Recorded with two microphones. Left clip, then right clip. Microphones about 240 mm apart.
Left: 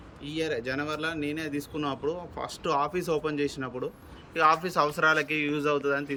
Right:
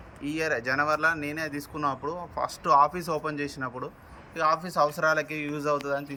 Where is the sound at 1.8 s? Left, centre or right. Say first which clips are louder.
Right 4 dB; centre.